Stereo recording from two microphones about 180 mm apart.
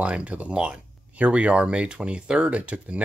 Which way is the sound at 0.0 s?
5° right (ahead or behind).